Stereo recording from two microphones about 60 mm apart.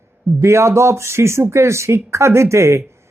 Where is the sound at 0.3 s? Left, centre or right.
Right.